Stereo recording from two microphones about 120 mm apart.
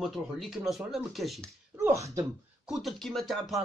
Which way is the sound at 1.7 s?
25° right (ahead or behind).